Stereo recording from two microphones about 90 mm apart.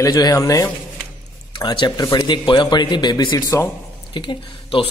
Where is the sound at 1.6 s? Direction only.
60° left (ahead or behind).